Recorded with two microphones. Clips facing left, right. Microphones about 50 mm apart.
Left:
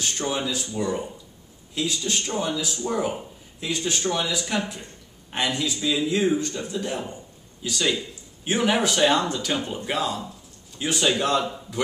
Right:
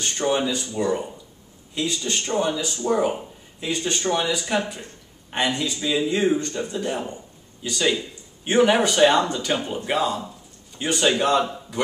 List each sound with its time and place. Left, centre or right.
0.3 s a man's voice: centre